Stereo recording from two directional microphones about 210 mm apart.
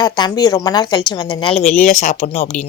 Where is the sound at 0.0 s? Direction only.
20° left (ahead or behind).